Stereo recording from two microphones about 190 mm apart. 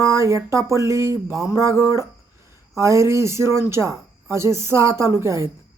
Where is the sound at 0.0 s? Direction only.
15° right (ahead or behind).